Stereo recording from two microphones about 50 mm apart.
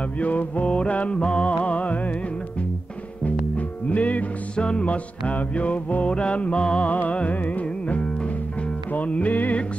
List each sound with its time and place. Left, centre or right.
0.2 s music: left
3.3 s music: left